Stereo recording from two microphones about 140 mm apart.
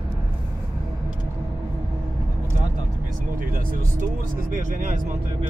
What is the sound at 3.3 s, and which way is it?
Vehicle, 75° right (ahead or behind).